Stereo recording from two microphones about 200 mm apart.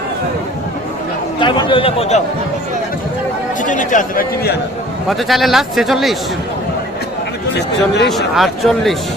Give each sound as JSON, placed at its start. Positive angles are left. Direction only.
{"t": 1.4, "sound": "a man's voice", "side_deg": 25}
{"t": 3.6, "sound": "a man's voice", "side_deg": 40}
{"t": 5.0, "sound": "a man's voice", "side_deg": 0}
{"t": 7.5, "sound": "speech", "side_deg": 60}
{"t": 8.1, "sound": "a man's voice", "side_deg": 0}